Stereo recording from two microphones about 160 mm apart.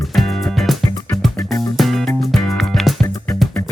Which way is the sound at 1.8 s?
Centre (ahead or behind).